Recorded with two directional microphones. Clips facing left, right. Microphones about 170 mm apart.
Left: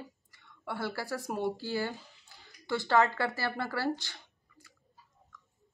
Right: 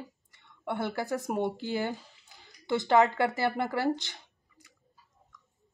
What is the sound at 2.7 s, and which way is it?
Speech, 20° right (ahead or behind).